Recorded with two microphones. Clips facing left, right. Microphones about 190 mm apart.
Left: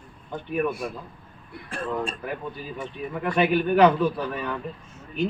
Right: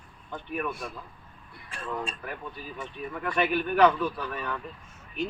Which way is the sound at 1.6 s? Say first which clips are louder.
Left 6 dB; 55° left (ahead or behind).